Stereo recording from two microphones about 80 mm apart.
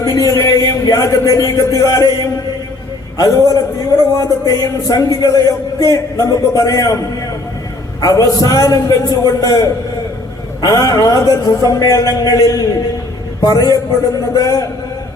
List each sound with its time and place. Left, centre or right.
0.0 s a man's voice: left
8.0 s a man's voice: left